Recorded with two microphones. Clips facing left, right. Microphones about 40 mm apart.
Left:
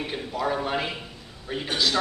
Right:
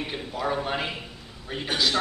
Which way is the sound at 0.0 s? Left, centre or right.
Centre.